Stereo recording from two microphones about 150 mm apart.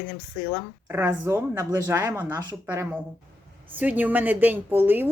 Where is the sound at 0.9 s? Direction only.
15° right (ahead or behind).